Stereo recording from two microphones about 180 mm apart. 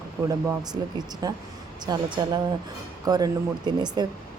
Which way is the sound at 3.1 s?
20° right (ahead or behind).